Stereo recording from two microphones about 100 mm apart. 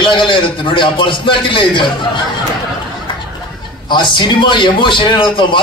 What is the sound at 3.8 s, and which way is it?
A man's voice, 50° left (ahead or behind).